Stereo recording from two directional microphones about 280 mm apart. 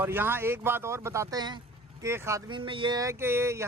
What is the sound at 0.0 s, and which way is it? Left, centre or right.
Speech, centre.